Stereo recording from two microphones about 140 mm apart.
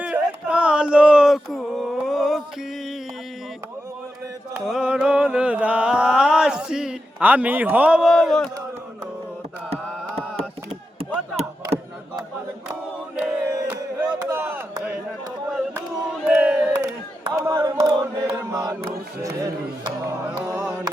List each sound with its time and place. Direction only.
0.0 s a sound: 10° right (ahead or behind)
4.6 s mantra: 5° right (ahead or behind)
13.1 s battle cry: 10° right (ahead or behind)
14.3 s chop: 15° right (ahead or behind)
16.2 s battle cry: 10° right (ahead or behind)
17.3 s chant: 20° right (ahead or behind)
20.5 s a sound: 10° right (ahead or behind)